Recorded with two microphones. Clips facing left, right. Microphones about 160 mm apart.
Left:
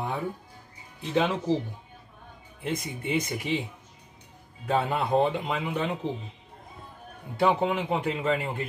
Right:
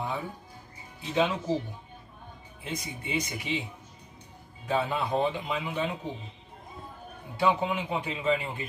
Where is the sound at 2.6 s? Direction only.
55° left (ahead or behind).